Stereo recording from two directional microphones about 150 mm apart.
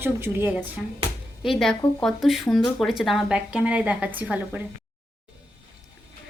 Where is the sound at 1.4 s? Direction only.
Centre (ahead or behind).